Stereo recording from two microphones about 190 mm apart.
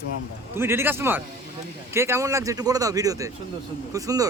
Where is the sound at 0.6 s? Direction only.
15° right (ahead or behind).